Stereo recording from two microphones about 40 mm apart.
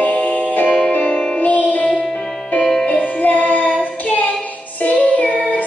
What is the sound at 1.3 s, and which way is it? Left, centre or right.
Music, left.